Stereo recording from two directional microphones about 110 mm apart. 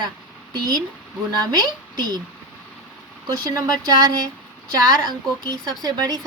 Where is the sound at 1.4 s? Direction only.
40° right (ahead or behind).